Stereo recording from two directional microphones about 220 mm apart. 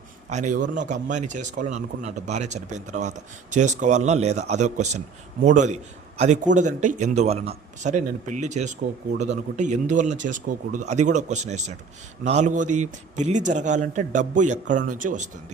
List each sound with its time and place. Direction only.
0.3 s speech: 35° right (ahead or behind)